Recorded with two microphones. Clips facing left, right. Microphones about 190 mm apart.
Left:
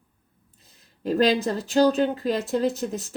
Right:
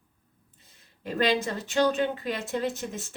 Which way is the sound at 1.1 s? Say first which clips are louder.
Left 5 dB; 40° left (ahead or behind).